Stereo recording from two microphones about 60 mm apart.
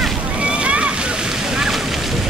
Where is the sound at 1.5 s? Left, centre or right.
Centre.